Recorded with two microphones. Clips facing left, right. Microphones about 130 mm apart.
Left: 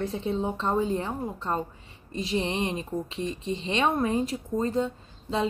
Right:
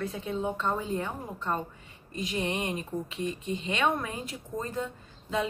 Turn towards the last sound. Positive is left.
turn(degrees=30)  # may be behind; listen again after turning